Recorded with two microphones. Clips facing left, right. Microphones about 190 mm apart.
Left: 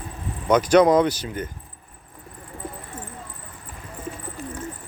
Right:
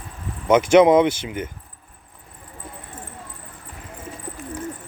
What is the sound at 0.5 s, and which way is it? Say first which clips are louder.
Speech: right 2 dB; 25° right (ahead or behind).